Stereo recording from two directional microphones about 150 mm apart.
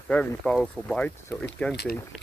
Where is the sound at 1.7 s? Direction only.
90° left.